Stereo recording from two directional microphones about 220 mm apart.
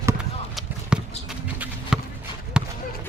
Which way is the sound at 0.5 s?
5° right (ahead or behind).